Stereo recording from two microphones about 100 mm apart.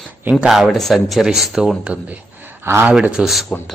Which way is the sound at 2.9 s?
10° right (ahead or behind).